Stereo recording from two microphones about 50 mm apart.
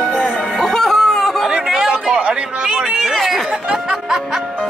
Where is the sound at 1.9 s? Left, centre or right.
Right.